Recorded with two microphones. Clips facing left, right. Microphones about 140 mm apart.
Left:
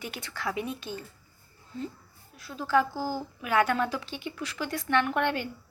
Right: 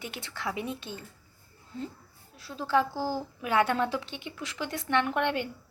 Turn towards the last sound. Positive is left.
turn(degrees=-20)  # may be behind; listen again after turning